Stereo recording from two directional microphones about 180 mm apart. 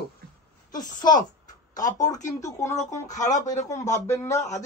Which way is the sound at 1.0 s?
20° left (ahead or behind).